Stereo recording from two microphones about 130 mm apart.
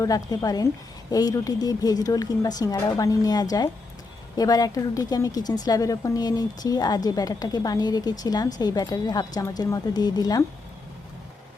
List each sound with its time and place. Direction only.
0.0 s a woman's voice: 30° left (ahead or behind)